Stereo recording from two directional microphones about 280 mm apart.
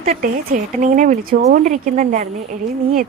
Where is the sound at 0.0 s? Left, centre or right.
Right.